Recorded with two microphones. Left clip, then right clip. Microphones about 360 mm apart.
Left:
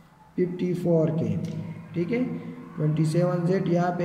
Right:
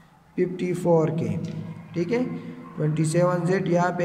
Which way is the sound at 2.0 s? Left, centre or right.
Centre.